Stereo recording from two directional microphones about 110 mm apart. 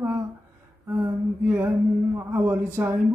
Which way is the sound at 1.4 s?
15° right (ahead or behind).